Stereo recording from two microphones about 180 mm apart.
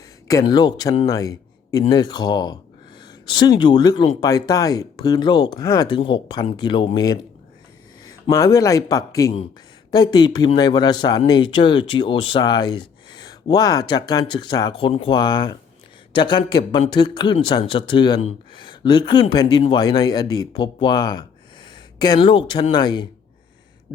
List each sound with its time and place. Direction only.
0.3 s a man's voice: 20° left (ahead or behind)
3.1 s a sound: 25° left (ahead or behind)
3.6 s speech: 25° left (ahead or behind)